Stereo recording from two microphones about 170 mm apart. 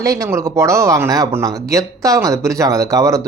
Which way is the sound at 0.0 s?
20° right (ahead or behind).